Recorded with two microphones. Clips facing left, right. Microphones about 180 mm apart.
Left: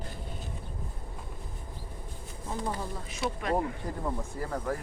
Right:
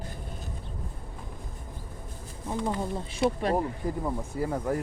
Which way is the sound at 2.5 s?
25° right (ahead or behind).